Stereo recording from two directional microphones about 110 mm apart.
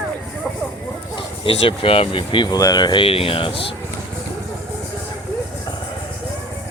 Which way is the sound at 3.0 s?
60° left (ahead or behind).